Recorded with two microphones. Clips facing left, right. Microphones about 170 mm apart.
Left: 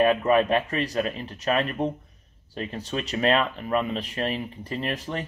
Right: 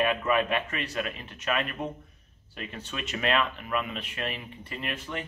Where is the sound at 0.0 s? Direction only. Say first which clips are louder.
Left 6 dB; 35° left (ahead or behind).